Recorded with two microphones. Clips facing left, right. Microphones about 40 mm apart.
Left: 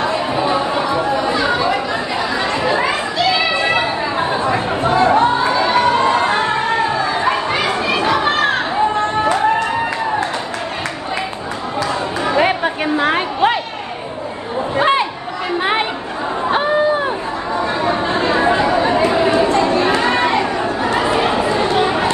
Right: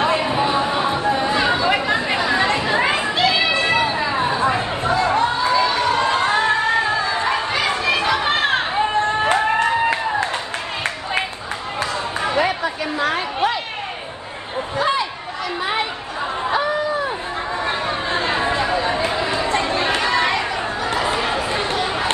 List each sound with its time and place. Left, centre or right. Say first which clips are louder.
0.0 s chatter: even; right
1.3 s chatter: left 1 dB; right
2.7 s a sound: left 1 dB; right
3.5 s chatter: left 2 dB; left
9.2 s music: left 3 dB; right
12.3 s chatter: left 5 dB; left
14.8 s chatter: left 5 dB; left
17.8 s chatter: left 5 dB; left